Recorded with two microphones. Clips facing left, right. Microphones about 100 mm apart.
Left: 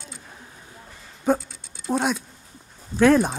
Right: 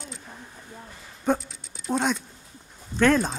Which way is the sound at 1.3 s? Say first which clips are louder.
Left 3 dB; 5° left (ahead or behind).